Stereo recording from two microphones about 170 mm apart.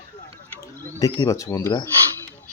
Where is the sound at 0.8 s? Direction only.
20° left (ahead or behind).